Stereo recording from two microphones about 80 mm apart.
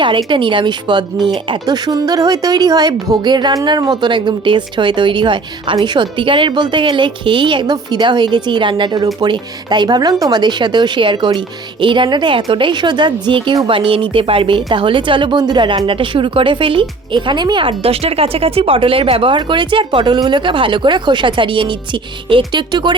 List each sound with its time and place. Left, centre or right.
0.3 s a woman's voice: right
1.5 s a woman's voice: right
11.3 s a woman's voice: right
13.7 s speech: right
15.9 s a woman's voice: right
18.8 s speech: right